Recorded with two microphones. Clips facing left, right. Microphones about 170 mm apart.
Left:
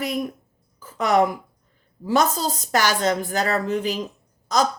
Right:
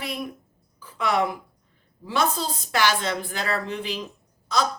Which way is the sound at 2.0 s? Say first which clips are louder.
Left 4 dB; 40° left (ahead or behind).